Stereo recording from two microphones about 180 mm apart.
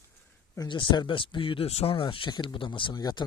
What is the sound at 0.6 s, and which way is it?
Speech, 25° left (ahead or behind).